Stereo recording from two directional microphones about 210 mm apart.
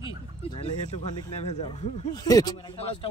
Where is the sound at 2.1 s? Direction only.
15° left (ahead or behind).